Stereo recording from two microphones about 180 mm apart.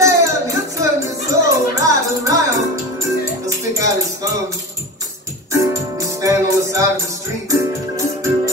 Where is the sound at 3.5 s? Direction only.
15° right (ahead or behind).